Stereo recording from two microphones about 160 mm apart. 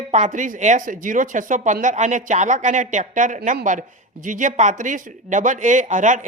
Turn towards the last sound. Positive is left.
turn(degrees=-50)  # may be behind; listen again after turning